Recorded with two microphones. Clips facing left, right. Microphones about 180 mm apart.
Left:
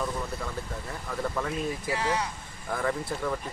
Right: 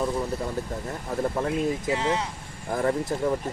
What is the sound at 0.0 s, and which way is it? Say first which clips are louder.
Speech: right 5 dB; 35° right (ahead or behind).